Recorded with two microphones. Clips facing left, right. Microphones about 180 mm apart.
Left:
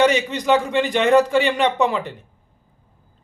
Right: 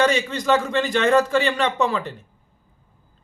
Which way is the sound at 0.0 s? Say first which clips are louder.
Left 2 dB; 15° left (ahead or behind).